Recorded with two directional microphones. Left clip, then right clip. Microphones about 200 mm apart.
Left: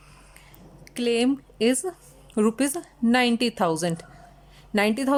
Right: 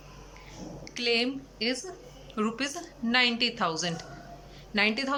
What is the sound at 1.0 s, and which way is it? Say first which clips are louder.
Speech: left 4 dB; 40° left (ahead or behind).